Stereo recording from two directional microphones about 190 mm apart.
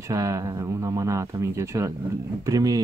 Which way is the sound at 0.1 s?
15° right (ahead or behind).